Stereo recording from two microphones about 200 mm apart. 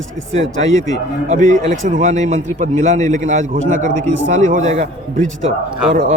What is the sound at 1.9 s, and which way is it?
A man's voice, 40° right (ahead or behind).